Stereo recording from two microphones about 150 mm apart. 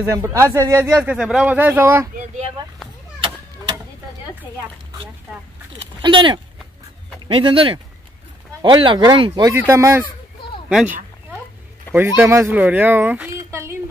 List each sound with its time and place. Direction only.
0.0 s speech: 20° right (ahead or behind)
5.9 s speech: 30° right (ahead or behind)
10.7 s speech: 5° right (ahead or behind)
13.5 s a sound: 15° right (ahead or behind)